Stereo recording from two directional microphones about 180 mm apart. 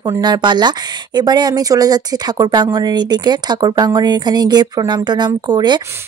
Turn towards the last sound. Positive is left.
turn(degrees=-25)  # may be behind; listen again after turning